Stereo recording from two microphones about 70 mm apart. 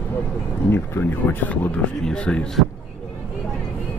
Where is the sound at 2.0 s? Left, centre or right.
Centre.